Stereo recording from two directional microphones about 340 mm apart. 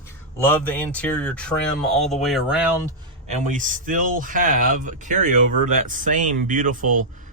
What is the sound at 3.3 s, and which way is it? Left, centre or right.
Speech, right.